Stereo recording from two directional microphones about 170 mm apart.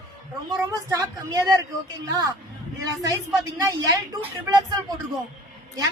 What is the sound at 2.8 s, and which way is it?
Speech, 20° right (ahead or behind).